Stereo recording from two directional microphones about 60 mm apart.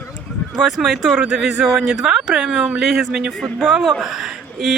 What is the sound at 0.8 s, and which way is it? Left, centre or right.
Speech, centre.